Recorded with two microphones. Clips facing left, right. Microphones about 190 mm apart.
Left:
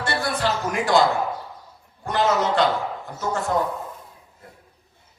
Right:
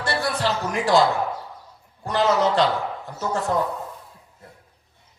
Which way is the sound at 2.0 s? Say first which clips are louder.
Right 1 dB; 35° right (ahead or behind).